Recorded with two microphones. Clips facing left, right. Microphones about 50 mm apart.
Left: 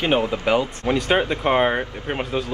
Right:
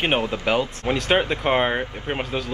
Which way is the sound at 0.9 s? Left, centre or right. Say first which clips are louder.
Left 1 dB; centre.